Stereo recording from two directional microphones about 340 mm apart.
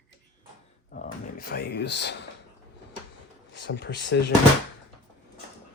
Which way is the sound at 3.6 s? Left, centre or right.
Left.